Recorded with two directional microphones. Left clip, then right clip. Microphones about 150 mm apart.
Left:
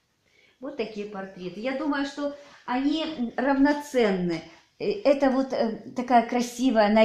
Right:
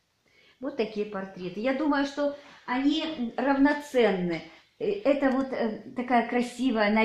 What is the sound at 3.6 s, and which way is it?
A woman's voice, 70° left (ahead or behind).